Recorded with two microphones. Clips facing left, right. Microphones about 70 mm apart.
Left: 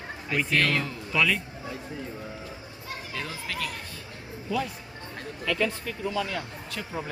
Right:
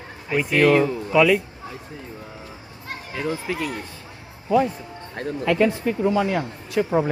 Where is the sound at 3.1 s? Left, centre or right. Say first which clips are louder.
Right 9 dB; right.